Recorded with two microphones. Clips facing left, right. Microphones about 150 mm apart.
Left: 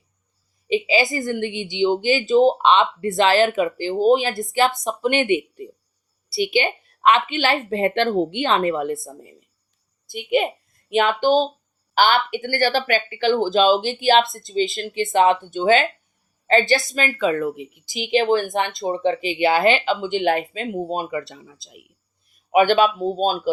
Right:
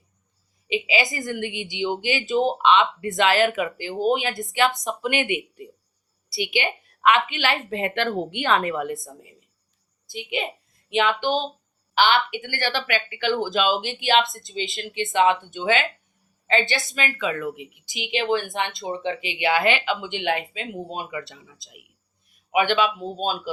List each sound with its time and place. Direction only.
0.7 s a woman's voice: 35° left (ahead or behind)
10.1 s a woman's voice: 55° left (ahead or behind)
10.8 s a woman's voice: 45° left (ahead or behind)